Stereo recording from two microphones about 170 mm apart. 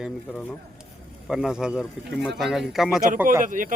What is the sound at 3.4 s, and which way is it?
Speech, 50° right (ahead or behind).